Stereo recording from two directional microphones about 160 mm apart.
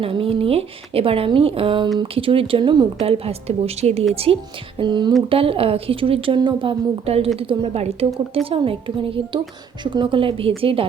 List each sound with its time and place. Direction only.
0.0 s speech: 35° right (ahead or behind)